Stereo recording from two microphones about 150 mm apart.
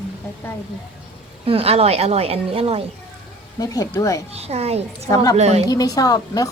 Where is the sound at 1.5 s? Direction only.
40° right (ahead or behind).